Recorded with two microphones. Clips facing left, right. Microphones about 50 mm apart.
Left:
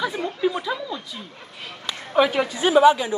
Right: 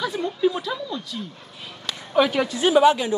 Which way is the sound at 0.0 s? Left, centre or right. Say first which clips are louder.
Right 1 dB; centre.